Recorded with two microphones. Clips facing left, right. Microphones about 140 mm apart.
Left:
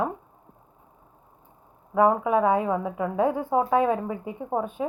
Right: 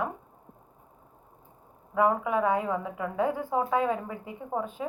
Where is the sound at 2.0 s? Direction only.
25° left (ahead or behind).